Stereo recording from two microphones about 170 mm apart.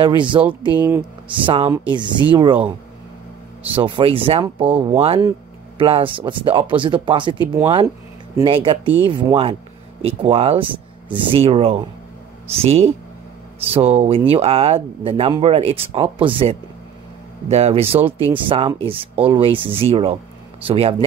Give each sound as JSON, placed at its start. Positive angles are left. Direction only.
{"t": 0.0, "sound": "speech", "side_deg": -30}
{"t": 0.7, "sound": "speech", "side_deg": -15}
{"t": 1.3, "sound": "speech", "side_deg": -30}
{"t": 3.7, "sound": "speech", "side_deg": -30}
{"t": 8.5, "sound": "speech", "side_deg": -30}